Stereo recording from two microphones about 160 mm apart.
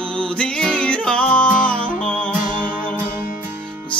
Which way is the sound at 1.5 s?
55° left (ahead or behind).